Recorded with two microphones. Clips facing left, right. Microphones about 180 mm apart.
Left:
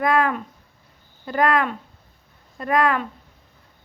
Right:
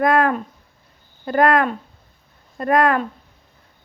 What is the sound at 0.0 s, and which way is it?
Speech, 50° right (ahead or behind).